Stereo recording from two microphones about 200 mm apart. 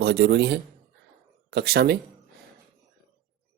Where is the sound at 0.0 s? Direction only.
55° right (ahead or behind).